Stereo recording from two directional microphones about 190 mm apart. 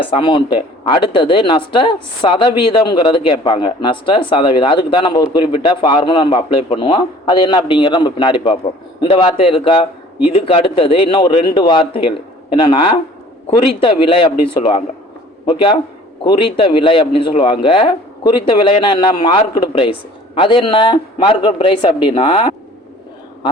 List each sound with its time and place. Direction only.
0.1 s speech: 25° left (ahead or behind)
16.2 s speech: 25° left (ahead or behind)